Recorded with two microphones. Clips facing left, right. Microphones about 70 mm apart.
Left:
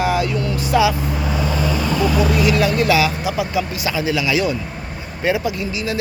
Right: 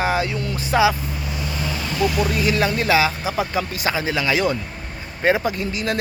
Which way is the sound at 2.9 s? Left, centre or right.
Right.